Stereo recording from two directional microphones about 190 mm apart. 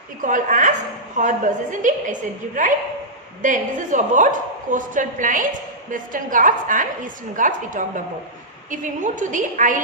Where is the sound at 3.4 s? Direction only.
40° right (ahead or behind).